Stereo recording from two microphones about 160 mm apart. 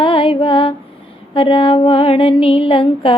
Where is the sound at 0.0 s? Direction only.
35° left (ahead or behind).